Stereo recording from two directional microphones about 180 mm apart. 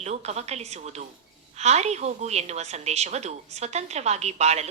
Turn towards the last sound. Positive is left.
turn(degrees=-35)  # may be behind; listen again after turning